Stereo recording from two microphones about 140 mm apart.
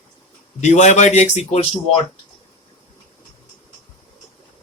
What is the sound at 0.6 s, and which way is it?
Speech, 55° left (ahead or behind).